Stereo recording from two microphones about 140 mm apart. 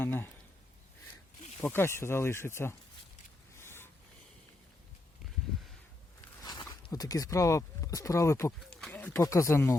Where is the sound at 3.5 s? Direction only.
15° left (ahead or behind).